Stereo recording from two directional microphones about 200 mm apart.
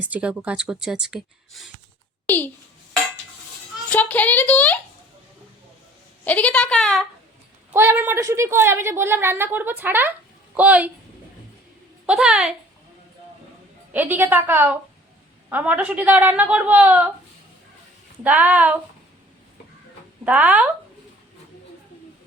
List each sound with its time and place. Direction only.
0.0 s speech: 5° right (ahead or behind)
2.2 s a child's voice: 10° left (ahead or behind)
3.8 s a sound: 5° left (ahead or behind)
6.2 s speech: 5° left (ahead or behind)
7.7 s a woman's voice: 10° right (ahead or behind)
12.0 s speech: 5° right (ahead or behind)
13.9 s a woman's voice: 10° right (ahead or behind)
18.2 s a woman's voice: 10° right (ahead or behind)
20.2 s a woman's voice: 5° right (ahead or behind)